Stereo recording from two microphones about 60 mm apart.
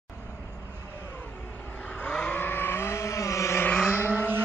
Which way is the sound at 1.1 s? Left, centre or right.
Left.